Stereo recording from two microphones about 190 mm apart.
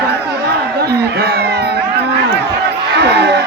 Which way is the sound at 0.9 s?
55° right (ahead or behind).